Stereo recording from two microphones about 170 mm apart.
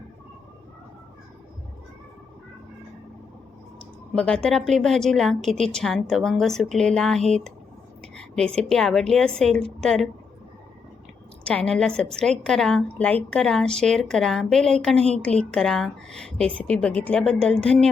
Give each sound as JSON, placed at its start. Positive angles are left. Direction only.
{"t": 4.1, "sound": "a woman's voice", "side_deg": 5}
{"t": 11.4, "sound": "a woman's voice", "side_deg": 5}